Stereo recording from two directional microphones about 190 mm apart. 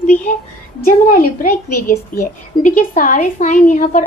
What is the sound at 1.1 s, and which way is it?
A woman's voice, 50° left (ahead or behind).